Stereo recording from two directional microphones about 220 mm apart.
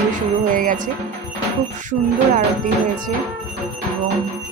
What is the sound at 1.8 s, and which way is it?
Speech, 35° right (ahead or behind).